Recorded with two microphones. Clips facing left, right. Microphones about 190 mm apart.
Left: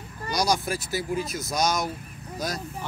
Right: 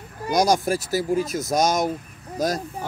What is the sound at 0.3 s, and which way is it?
Speech, 50° right (ahead or behind).